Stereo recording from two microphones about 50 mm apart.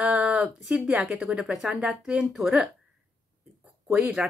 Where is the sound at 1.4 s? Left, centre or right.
Centre.